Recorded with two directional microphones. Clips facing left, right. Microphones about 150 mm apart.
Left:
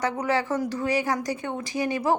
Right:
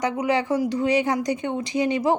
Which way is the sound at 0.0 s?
15° right (ahead or behind).